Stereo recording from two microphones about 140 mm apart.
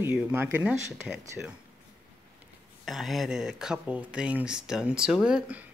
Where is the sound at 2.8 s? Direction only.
Centre (ahead or behind).